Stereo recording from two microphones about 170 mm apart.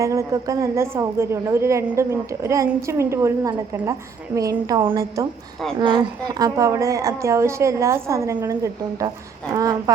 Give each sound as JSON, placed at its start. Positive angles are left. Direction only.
{"t": 0.0, "sound": "a woman's voice", "side_deg": -20}